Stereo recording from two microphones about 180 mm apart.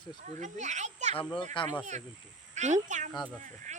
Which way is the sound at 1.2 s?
25° left (ahead or behind).